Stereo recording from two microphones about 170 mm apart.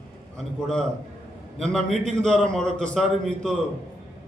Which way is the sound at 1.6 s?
5° left (ahead or behind).